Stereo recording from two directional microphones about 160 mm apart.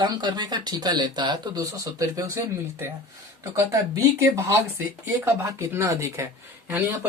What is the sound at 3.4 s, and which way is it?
Speech, 20° right (ahead or behind).